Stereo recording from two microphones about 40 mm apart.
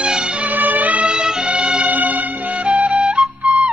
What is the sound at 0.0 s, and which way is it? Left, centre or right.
Music, right.